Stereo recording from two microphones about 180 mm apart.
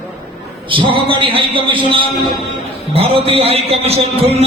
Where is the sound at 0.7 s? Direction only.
30° right (ahead or behind).